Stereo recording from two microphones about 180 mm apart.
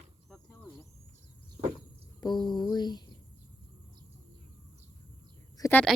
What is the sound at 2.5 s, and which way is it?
Speech, 25° left (ahead or behind).